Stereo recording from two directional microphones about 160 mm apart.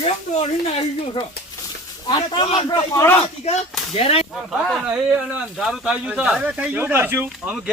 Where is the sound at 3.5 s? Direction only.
40° left (ahead or behind).